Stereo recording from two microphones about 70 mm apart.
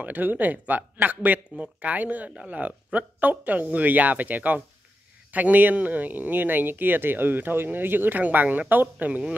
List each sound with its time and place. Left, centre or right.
0.0 s speech: right